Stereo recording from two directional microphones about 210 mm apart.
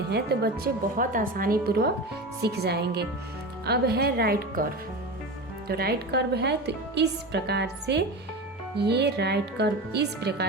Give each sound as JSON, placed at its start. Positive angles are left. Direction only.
{"t": 0.1, "sound": "a woman's voice", "side_deg": -50}
{"t": 5.6, "sound": "a woman's voice", "side_deg": -45}